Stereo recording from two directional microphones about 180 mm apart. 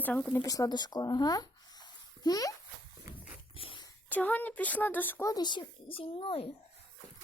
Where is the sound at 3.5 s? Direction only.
30° left (ahead or behind).